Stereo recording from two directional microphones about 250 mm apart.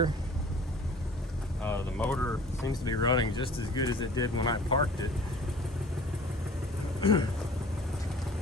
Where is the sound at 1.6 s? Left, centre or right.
Centre.